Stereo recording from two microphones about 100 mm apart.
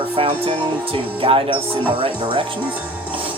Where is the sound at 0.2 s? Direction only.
65° right (ahead or behind).